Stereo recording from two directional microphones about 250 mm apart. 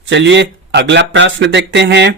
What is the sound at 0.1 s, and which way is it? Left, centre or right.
Speech, right.